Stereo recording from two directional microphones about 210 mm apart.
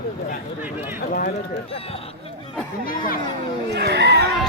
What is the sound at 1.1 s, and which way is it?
Speech, 45° left (ahead or behind).